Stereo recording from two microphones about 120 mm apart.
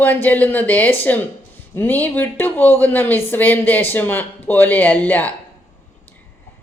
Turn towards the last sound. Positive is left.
turn(degrees=15)  # may be behind; listen again after turning